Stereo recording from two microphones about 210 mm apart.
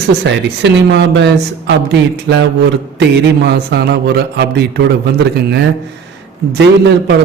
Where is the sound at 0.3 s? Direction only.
55° right (ahead or behind).